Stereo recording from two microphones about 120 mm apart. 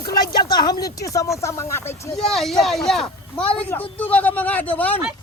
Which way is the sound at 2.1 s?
Centre (ahead or behind).